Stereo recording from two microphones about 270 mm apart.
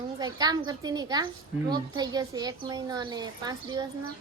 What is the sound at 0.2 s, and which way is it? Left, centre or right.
A woman's voice, centre.